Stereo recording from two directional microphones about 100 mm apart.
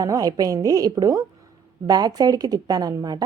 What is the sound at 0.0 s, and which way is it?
A woman's voice, 40° right (ahead or behind).